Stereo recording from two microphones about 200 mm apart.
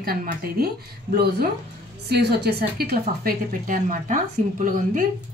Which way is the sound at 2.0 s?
55° right (ahead or behind).